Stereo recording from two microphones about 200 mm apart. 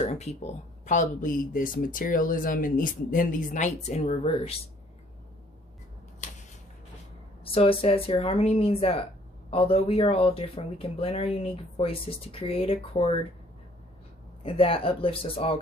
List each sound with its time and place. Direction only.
0.0 s a sound: 35° left (ahead or behind)
0.9 s speech: 40° left (ahead or behind)
7.4 s speech: 30° left (ahead or behind)
14.4 s speech: 25° left (ahead or behind)